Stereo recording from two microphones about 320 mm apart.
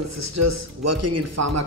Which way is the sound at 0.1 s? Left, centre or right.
Right.